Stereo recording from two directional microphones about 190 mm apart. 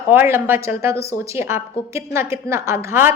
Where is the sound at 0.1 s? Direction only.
10° right (ahead or behind).